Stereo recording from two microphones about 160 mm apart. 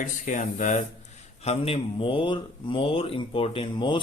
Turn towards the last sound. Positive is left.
turn(degrees=30)  # may be behind; listen again after turning